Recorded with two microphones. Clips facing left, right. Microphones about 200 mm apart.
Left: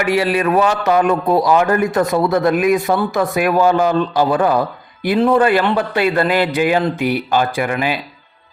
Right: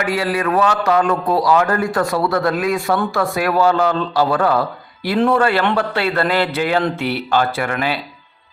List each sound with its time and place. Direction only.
0.0 s a man's voice: 20° left (ahead or behind)